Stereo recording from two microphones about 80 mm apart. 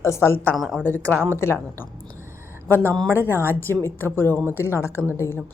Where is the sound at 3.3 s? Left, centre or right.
Left.